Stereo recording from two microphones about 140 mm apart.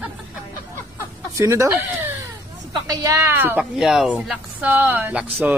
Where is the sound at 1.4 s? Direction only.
20° right (ahead or behind).